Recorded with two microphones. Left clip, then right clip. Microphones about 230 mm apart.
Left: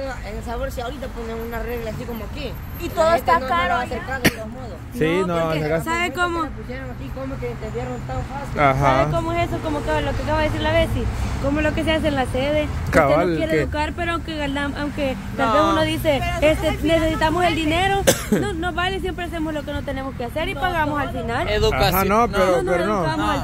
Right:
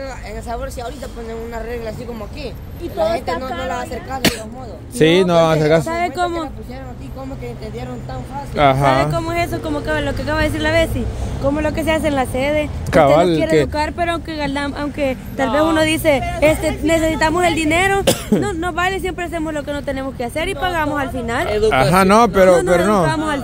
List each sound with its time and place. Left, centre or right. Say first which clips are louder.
2.8 s speech: left 1 dB; left
3.7 s speech: left 1 dB; right
5.9 s speech: right 2 dB; centre
8.5 s speech: right 3 dB; right
9.1 s speech: right 2 dB; right
11.5 s a woman's voice: right 1 dB; right
18.0 s speech: right 2 dB; right
18.4 s speech: right 4 dB; right
21.9 s speech: right 6 dB; right